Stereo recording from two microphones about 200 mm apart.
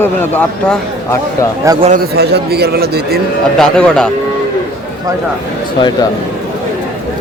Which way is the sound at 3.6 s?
5° left (ahead or behind).